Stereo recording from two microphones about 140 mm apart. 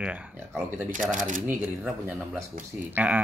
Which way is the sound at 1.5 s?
15° right (ahead or behind).